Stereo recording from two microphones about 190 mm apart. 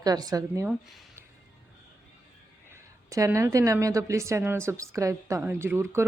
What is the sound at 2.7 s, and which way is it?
A woman's voice, 15° right (ahead or behind).